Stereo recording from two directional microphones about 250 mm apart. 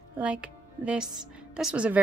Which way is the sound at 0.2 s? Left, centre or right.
Centre.